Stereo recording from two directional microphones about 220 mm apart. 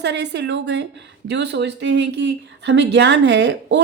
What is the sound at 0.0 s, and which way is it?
A woman's voice, 50° right (ahead or behind).